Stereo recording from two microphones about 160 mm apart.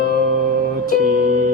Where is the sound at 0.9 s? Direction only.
60° right (ahead or behind).